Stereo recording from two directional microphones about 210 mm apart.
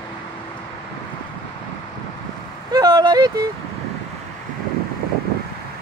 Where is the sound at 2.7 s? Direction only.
20° right (ahead or behind).